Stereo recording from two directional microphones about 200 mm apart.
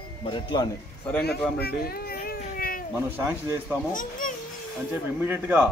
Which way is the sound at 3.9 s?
40° left (ahead or behind).